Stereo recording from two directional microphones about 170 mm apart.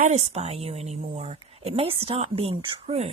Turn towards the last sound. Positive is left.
turn(degrees=-35)  # may be behind; listen again after turning